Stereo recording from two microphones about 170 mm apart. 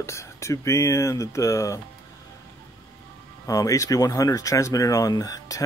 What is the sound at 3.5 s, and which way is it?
Speech, 20° left (ahead or behind).